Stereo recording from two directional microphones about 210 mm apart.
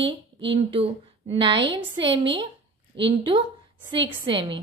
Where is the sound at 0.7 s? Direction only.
25° right (ahead or behind).